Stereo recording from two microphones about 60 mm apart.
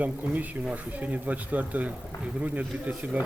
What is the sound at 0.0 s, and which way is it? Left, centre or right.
A man's voice, right.